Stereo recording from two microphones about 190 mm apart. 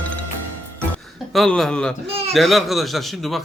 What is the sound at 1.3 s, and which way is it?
Speech, centre (ahead or behind).